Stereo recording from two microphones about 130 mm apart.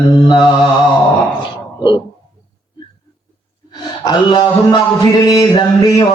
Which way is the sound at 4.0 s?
35° left (ahead or behind).